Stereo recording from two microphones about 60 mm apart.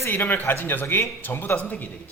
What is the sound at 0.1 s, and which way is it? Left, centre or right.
Speech, left.